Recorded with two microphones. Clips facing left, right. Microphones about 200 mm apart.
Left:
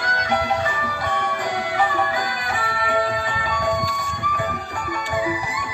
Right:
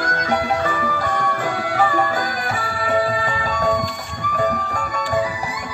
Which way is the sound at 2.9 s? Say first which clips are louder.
Right 4 dB; 45° right (ahead or behind).